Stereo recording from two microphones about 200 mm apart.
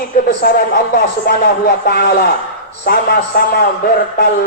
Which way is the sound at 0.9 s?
55° left (ahead or behind).